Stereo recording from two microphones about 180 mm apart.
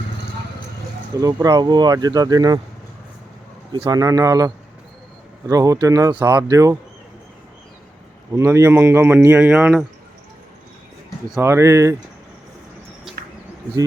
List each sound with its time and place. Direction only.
1.2 s speech: 20° right (ahead or behind)
3.7 s speech: 25° right (ahead or behind)
8.4 s speech: 15° right (ahead or behind)
11.3 s speech: 15° right (ahead or behind)